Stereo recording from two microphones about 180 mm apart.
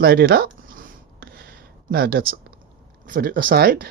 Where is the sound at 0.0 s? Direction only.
60° right (ahead or behind).